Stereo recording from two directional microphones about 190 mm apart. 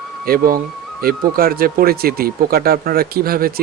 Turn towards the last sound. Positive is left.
turn(degrees=-50)  # may be behind; listen again after turning